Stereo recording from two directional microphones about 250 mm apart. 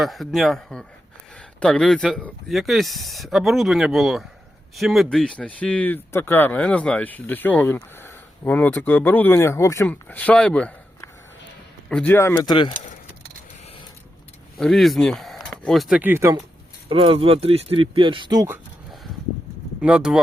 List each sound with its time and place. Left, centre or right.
0.0 s speech: centre
12.7 s speech: left
14.6 s speech: centre
16.9 s speech: right; by 20.1 s centre